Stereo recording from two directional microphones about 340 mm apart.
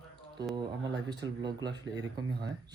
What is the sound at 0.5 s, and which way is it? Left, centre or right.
Speech, centre.